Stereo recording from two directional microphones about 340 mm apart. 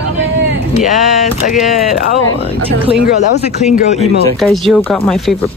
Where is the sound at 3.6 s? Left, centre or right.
Centre.